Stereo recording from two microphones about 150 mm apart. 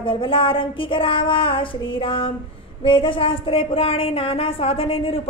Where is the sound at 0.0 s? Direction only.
35° left (ahead or behind).